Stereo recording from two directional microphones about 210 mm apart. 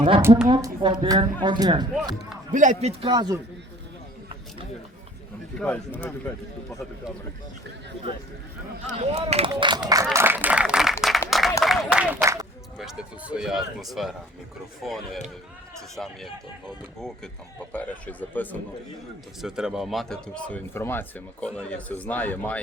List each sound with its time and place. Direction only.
0.2 s a woman's voice: 10° right (ahead or behind)
0.5 s speech: 20° right (ahead or behind)
2.5 s a man's voice: 35° right (ahead or behind)
3.0 s speech: 20° right (ahead or behind)
5.5 s speech: 5° left (ahead or behind)
8.9 s speech: 30° right (ahead or behind)
9.5 s a sound: 20° right (ahead or behind); by 10.9 s 5° right (ahead or behind)
11.3 s applause: centre (ahead or behind)
11.6 s speech: centre (ahead or behind)
12.7 s speech: centre (ahead or behind)
17.7 s speech: 10° left (ahead or behind)
19.4 s speech: 5° right (ahead or behind)